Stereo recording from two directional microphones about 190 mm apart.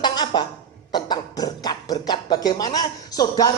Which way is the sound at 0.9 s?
20° left (ahead or behind).